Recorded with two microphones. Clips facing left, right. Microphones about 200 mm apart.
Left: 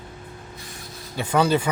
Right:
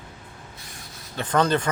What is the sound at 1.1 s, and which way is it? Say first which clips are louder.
Speech: left 1 dB; 10° left (ahead or behind).